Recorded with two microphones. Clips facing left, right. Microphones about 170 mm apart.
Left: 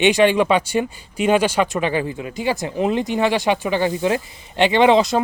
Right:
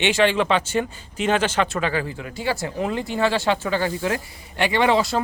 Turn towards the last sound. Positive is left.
turn(degrees=20)  # may be behind; listen again after turning